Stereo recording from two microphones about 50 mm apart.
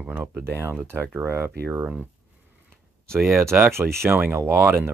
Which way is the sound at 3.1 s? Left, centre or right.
Right.